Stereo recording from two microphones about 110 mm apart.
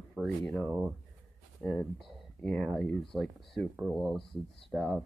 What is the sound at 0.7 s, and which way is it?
Speech, 15° right (ahead or behind).